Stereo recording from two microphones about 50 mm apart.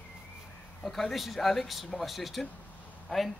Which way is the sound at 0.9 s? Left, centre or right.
Centre.